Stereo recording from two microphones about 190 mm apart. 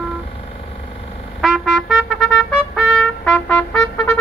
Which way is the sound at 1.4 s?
Centre (ahead or behind).